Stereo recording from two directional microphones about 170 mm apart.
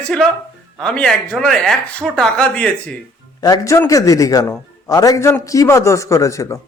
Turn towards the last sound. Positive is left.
turn(degrees=20)  # may be behind; listen again after turning